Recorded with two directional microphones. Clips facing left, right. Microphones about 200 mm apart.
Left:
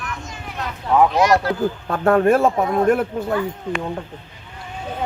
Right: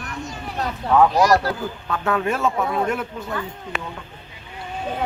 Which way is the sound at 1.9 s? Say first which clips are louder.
Left 7 dB; 50° left (ahead or behind).